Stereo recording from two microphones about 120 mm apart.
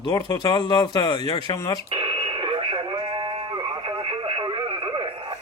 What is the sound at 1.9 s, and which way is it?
Radio, 45° right (ahead or behind).